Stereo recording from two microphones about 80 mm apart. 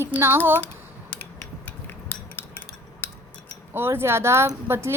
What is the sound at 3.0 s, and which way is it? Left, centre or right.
Scissors, left.